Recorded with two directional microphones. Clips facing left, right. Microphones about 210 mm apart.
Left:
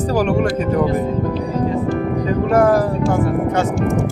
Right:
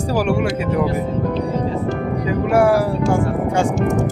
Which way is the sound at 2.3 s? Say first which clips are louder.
Even; 10° right (ahead or behind).